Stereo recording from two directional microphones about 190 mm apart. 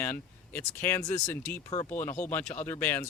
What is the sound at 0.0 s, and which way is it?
Speech, 10° left (ahead or behind).